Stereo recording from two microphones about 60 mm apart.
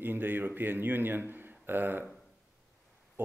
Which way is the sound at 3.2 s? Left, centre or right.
Right.